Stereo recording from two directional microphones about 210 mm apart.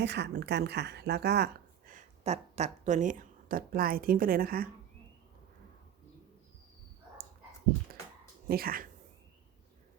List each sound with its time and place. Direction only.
0.0 s a woman's voice: 55° right (ahead or behind)
1.9 s speech: 35° right (ahead or behind)
8.4 s a woman's voice: 45° right (ahead or behind)